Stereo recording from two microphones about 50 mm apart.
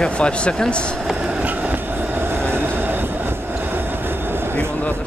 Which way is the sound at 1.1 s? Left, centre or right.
Centre.